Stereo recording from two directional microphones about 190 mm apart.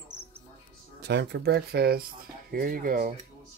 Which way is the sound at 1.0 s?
65° right (ahead or behind).